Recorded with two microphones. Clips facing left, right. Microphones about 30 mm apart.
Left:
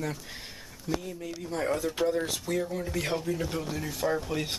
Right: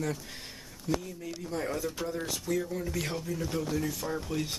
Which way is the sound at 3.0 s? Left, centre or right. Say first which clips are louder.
Left 4 dB; left.